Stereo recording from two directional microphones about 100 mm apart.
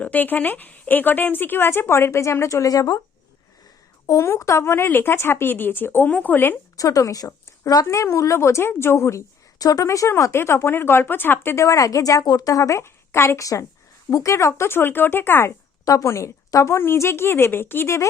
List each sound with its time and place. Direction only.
0.0 s a woman's voice: 15° left (ahead or behind); by 3.0 s 40° left (ahead or behind)
4.0 s a woman's voice: 25° left (ahead or behind)
6.7 s a woman's voice: 35° left (ahead or behind)
15.8 s a woman's voice: 35° left (ahead or behind)